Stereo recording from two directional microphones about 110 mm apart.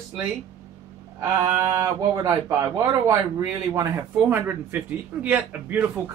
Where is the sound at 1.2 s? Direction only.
25° right (ahead or behind).